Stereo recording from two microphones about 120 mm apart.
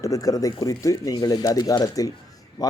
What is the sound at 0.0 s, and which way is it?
Speech, 30° left (ahead or behind).